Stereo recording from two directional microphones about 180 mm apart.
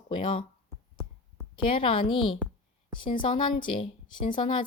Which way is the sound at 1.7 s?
30° left (ahead or behind).